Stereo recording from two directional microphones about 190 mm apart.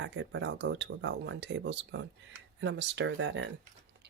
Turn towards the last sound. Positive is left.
turn(degrees=-70)  # may be behind; listen again after turning